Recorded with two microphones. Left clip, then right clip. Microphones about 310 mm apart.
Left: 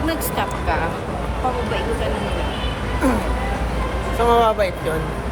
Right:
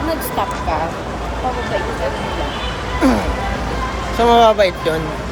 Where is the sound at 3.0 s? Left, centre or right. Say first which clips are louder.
Right 5 dB; right.